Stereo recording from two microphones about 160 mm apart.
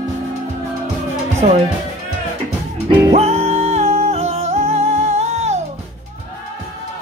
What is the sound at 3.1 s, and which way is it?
Music, 40° right (ahead or behind).